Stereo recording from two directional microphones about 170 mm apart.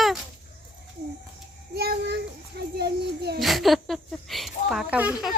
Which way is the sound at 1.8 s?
70° right (ahead or behind).